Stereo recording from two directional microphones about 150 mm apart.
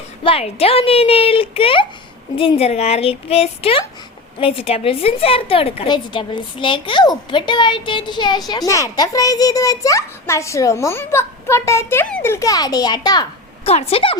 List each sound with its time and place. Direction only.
0.2 s a woman's voice: 40° left (ahead or behind)
13.7 s a woman's voice: 40° left (ahead or behind)